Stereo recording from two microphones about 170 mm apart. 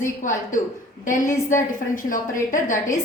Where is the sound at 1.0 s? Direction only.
50° left (ahead or behind).